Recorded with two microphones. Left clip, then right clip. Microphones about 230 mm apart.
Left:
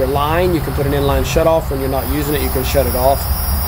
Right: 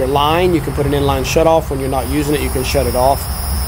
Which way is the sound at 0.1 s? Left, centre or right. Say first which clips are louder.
Right 2 dB; right.